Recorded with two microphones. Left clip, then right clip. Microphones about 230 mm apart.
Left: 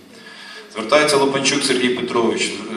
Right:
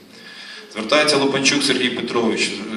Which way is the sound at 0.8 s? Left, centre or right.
Right.